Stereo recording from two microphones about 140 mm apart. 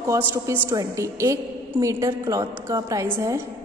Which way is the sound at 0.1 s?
15° right (ahead or behind).